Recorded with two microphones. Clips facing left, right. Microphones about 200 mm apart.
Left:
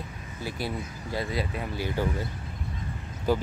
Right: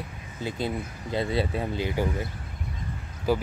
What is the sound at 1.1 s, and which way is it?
Speech, 30° right (ahead or behind).